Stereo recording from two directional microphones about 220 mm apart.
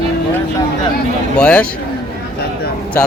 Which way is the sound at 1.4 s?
5° left (ahead or behind).